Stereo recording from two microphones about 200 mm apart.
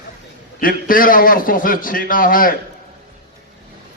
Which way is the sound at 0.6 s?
45° left (ahead or behind).